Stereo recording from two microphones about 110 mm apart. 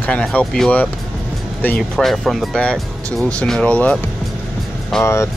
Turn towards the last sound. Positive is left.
turn(degrees=25)  # may be behind; listen again after turning